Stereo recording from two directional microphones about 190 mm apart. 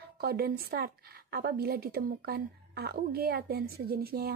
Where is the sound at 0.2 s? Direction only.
55° right (ahead or behind).